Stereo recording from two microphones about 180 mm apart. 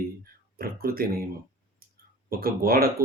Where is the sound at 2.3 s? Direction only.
55° right (ahead or behind).